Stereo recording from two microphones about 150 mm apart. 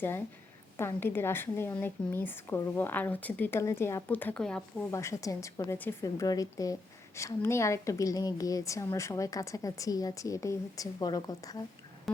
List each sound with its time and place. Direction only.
0.8 s speech: 15° left (ahead or behind)
4.9 s a woman's voice: 20° left (ahead or behind)
12.1 s music: centre (ahead or behind)